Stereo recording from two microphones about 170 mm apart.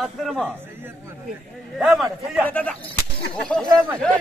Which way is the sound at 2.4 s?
10° left (ahead or behind).